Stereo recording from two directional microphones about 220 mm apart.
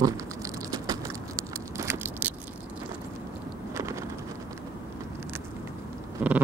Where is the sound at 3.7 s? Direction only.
15° right (ahead or behind).